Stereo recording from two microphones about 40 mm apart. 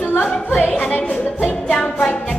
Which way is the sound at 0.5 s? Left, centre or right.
Left.